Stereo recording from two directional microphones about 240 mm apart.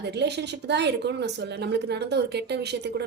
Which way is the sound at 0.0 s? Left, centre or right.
Right.